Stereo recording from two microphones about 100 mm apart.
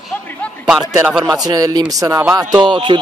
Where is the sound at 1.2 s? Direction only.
40° right (ahead or behind).